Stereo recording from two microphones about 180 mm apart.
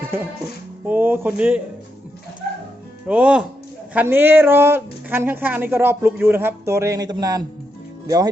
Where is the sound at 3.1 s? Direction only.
5° right (ahead or behind).